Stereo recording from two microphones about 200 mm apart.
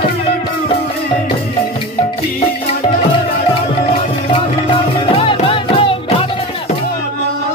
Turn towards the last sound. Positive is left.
turn(degrees=25)  # may be behind; listen again after turning